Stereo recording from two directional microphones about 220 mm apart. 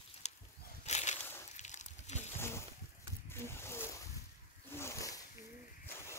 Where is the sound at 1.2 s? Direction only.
10° left (ahead or behind).